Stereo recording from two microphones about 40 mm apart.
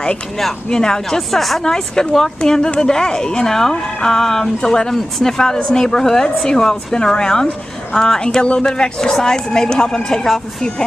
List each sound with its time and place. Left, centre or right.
0.7 s a woman's voice: centre
1.1 s a woman's voice: centre
1.6 s a woman's voice: centre